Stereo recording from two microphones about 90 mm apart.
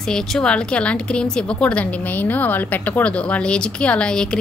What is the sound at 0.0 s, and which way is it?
A woman's voice, 5° left (ahead or behind).